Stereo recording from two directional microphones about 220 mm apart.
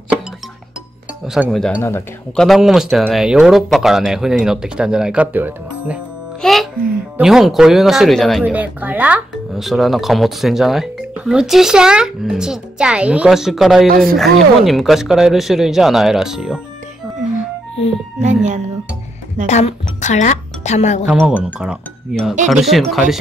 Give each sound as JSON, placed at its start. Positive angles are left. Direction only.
{"t": 1.2, "sound": "speech", "side_deg": 0}
{"t": 2.4, "sound": "speech", "side_deg": 0}
{"t": 19.4, "sound": "speech", "side_deg": 30}
{"t": 21.0, "sound": "speech", "side_deg": -5}